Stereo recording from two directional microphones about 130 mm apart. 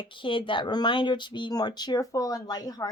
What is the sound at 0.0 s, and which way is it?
A woman's voice, 40° left (ahead or behind).